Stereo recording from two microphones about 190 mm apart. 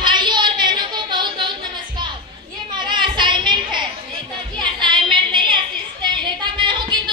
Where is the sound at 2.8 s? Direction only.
25° right (ahead or behind).